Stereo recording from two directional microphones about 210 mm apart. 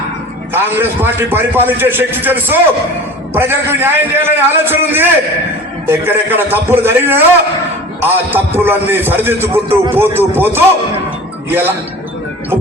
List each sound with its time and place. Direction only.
0.5 s a man's voice: 10° right (ahead or behind)
9.5 s a man's voice: 25° right (ahead or behind)
10.2 s a man's voice: 10° right (ahead or behind)